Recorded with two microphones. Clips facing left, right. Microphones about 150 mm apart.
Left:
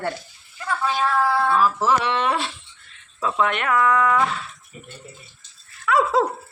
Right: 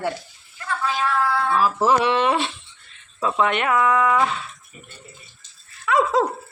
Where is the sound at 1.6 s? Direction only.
15° right (ahead or behind).